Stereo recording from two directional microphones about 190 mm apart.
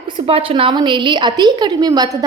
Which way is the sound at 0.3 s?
30° right (ahead or behind).